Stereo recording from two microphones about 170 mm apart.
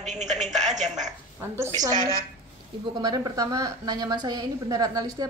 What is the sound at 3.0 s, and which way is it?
A woman's voice, 20° right (ahead or behind).